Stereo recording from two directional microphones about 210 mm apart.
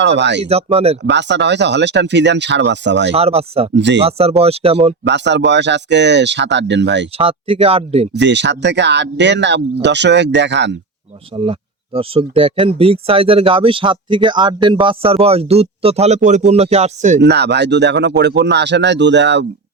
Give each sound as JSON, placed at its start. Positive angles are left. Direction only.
{"t": 0.2, "sound": "speech", "side_deg": -55}
{"t": 0.4, "sound": "speech", "side_deg": -30}
{"t": 1.0, "sound": "speech", "side_deg": -55}
{"t": 3.1, "sound": "speech", "side_deg": -30}
{"t": 3.8, "sound": "speech", "side_deg": -55}
{"t": 4.0, "sound": "speech", "side_deg": -30}
{"t": 5.0, "sound": "speech", "side_deg": -55}
{"t": 7.2, "sound": "speech", "side_deg": -25}
{"t": 8.1, "sound": "speech", "side_deg": -55}
{"t": 11.9, "sound": "speech", "side_deg": -25}
{"t": 17.2, "sound": "speech", "side_deg": -50}